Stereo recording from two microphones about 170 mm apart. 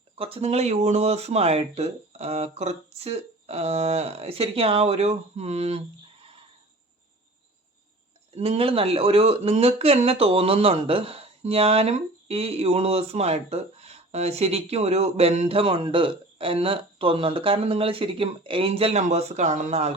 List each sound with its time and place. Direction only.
0.2 s speech: 35° right (ahead or behind)
8.4 s speech: 35° right (ahead or behind)